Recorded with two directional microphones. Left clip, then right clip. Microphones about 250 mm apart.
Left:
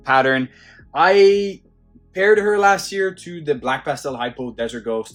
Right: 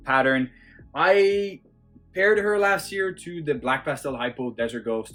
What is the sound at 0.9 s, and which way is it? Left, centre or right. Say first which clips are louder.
Speech: left 6 dB; left.